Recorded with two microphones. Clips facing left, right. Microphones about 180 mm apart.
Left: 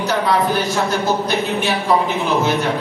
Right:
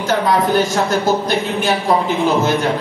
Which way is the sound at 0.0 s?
45° right (ahead or behind).